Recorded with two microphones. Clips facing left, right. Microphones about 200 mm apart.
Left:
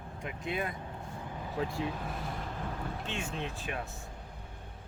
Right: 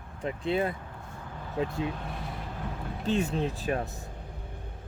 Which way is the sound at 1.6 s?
20° right (ahead or behind).